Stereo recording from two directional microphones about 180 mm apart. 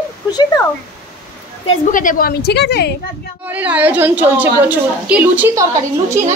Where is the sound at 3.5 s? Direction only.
10° right (ahead or behind).